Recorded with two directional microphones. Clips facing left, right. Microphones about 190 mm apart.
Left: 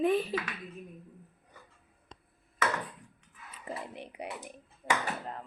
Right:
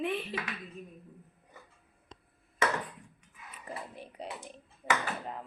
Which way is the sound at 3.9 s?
20° left (ahead or behind).